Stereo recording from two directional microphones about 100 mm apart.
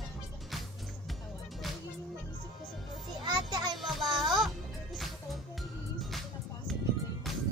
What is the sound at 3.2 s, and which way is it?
Children playing, 45° right (ahead or behind).